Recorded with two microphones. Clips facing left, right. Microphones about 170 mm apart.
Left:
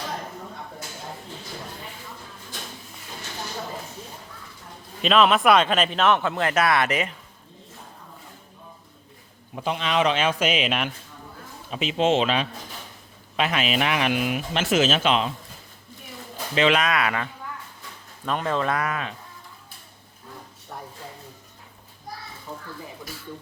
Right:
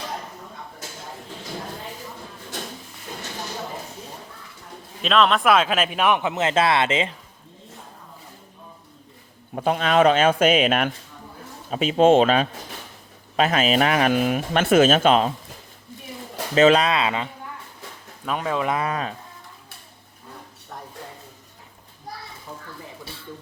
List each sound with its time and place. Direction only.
5.0 s speech: centre (ahead or behind); by 7.1 s 25° right (ahead or behind)
9.6 s speech: 45° right (ahead or behind)
16.6 s speech: 40° right (ahead or behind); by 17.2 s 20° right (ahead or behind)
18.3 s speech: 5° right (ahead or behind)
18.8 s speech: 35° right (ahead or behind)